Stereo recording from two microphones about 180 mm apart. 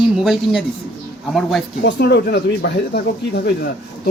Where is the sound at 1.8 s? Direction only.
65° left (ahead or behind).